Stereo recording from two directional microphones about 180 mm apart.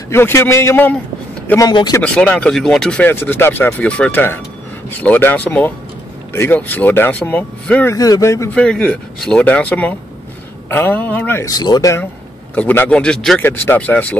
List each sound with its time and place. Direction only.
0.1 s speech: 15° left (ahead or behind)
1.7 s speech: 25° left (ahead or behind)
2.0 s speech: 5° left (ahead or behind)
8.5 s speech: 5° left (ahead or behind)